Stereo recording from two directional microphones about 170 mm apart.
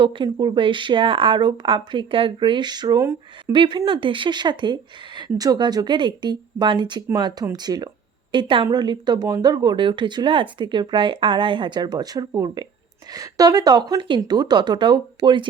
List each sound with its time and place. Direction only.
0.0 s speech: 30° right (ahead or behind)